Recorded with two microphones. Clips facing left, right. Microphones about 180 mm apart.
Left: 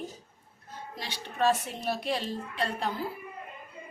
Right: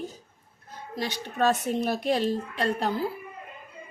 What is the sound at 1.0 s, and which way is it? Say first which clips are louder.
A woman's voice: right 3 dB; 45° right (ahead or behind).